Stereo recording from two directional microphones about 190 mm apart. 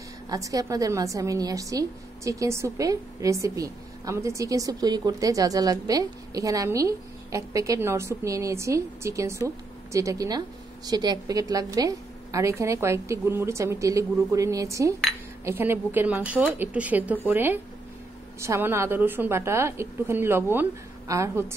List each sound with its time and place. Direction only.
0.3 s a woman's voice: 20° right (ahead or behind)